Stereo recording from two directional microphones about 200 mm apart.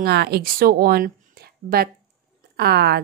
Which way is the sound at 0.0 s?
55° right (ahead or behind).